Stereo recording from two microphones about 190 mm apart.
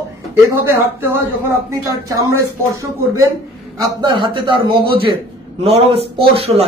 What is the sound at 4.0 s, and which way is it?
A man's voice, 25° right (ahead or behind).